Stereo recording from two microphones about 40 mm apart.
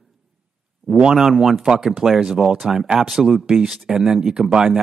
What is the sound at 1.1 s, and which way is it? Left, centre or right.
Speech, centre.